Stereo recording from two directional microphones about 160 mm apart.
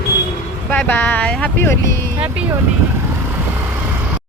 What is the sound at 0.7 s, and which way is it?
Speech, 10° left (ahead or behind).